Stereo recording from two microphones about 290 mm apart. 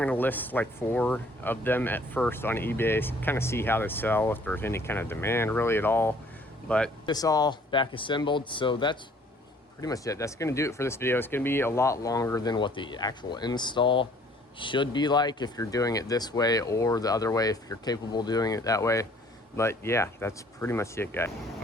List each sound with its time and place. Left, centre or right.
0.0 s speech: centre
7.0 s speech: centre